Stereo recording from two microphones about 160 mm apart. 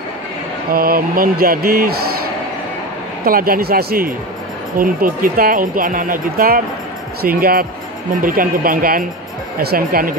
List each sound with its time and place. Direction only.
0.7 s speech: 65° right (ahead or behind)
3.3 s speech: 65° right (ahead or behind)